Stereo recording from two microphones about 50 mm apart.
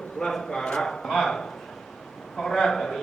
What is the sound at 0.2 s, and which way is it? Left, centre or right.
A man's voice, centre.